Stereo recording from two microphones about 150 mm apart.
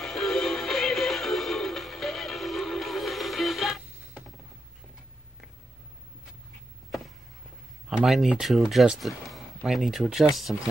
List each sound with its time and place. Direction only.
0.0 s music: centre (ahead or behind)
7.9 s speech: centre (ahead or behind)